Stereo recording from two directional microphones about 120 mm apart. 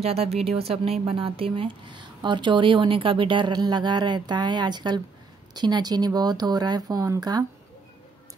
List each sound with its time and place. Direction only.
0.0 s speech: 55° right (ahead or behind); by 7.4 s 35° right (ahead or behind)